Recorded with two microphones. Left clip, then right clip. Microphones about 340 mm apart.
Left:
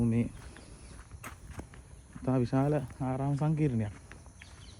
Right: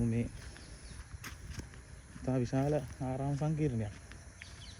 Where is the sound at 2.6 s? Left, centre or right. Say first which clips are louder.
Left 2 dB; left.